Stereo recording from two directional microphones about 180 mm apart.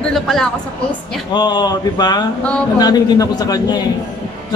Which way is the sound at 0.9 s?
25° left (ahead or behind).